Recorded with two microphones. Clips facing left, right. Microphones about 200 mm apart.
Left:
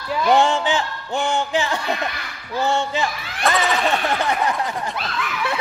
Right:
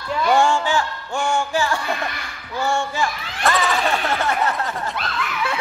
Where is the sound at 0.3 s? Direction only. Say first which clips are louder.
Left 1 dB; 20° left (ahead or behind).